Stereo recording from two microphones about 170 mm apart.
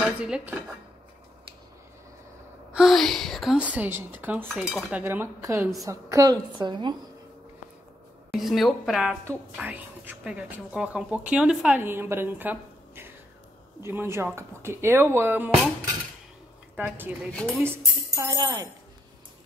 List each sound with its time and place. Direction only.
0.0 s a woman's voice: 5° right (ahead or behind)
2.7 s a woman's voice: centre (ahead or behind)
5.0 s a woman's voice: 15° right (ahead or behind)
8.3 s a woman's voice: centre (ahead or behind)
9.2 s a woman's voice: 10° right (ahead or behind)
16.7 s a woman's voice: 10° right (ahead or behind)